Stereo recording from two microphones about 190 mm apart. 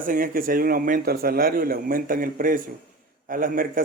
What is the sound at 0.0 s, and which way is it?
Speech, 45° right (ahead or behind).